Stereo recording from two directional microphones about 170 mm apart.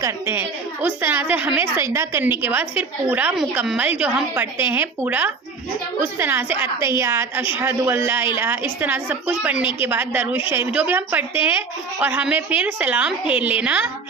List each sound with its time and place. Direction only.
0.0 s a woman's voice: 10° right (ahead or behind)